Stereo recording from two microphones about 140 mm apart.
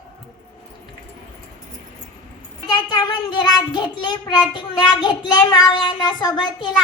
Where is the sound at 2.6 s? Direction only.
30° left (ahead or behind).